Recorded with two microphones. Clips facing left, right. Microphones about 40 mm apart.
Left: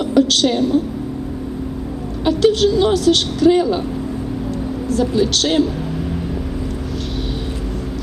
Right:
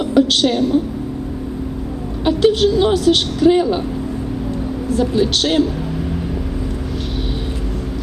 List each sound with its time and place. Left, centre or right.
0.1 s a sound: centre
0.4 s a woman's voice: centre
2.2 s a woman's voice: centre
4.9 s a woman's voice: centre